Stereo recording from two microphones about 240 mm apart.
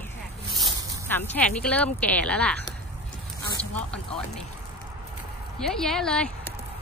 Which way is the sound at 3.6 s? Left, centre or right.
Centre.